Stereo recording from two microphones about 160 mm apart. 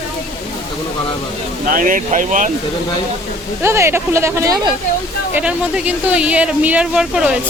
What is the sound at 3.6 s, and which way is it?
Speech, 15° right (ahead or behind).